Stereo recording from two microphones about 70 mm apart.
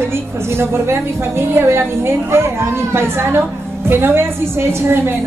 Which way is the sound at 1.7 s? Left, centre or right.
Right.